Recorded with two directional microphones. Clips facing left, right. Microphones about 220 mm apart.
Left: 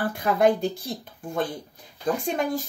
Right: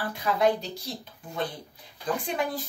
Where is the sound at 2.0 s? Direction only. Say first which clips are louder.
Left 4 dB; 45° left (ahead or behind).